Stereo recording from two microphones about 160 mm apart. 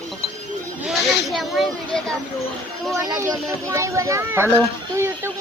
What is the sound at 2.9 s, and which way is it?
Speech, 20° right (ahead or behind).